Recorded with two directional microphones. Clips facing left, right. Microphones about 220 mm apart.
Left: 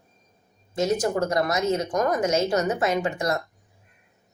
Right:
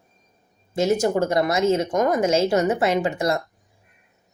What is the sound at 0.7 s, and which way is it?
Speech, 25° right (ahead or behind).